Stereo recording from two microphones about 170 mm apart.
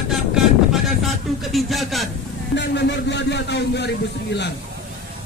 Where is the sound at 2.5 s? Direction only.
85° left.